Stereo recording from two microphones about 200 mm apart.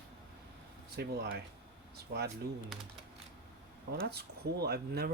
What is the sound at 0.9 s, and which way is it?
Speech, 55° right (ahead or behind).